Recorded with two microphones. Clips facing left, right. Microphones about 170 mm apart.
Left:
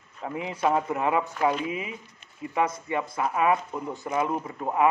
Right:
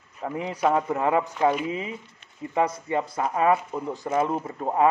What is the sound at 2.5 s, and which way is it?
A man's voice, 30° right (ahead or behind).